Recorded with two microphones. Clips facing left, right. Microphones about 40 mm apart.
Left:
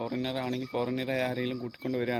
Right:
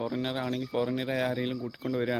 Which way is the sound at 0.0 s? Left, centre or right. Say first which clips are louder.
Right 1 dB; centre.